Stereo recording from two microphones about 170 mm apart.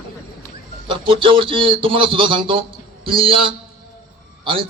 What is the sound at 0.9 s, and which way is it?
A man's voice, 30° right (ahead or behind).